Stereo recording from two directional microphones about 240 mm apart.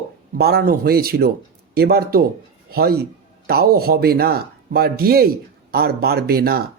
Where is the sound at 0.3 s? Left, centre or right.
Right.